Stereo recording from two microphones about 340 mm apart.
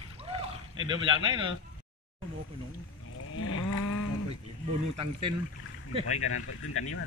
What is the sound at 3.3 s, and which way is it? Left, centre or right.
Cattle, left.